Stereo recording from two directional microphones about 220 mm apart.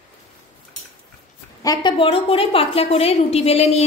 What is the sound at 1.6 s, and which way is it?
A woman's voice, 20° left (ahead or behind).